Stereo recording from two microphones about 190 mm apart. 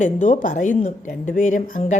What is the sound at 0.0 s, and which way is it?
A woman's voice, 45° left (ahead or behind).